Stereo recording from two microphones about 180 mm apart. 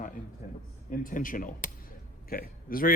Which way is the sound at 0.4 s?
50° left (ahead or behind).